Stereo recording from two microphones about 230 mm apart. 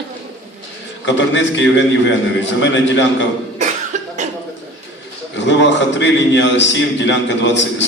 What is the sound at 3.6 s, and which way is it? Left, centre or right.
Cough, right.